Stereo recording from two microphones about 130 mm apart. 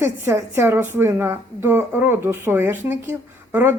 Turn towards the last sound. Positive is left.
turn(degrees=-15)  # may be behind; listen again after turning